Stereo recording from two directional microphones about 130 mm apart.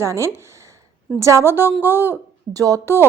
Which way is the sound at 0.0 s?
20° right (ahead or behind).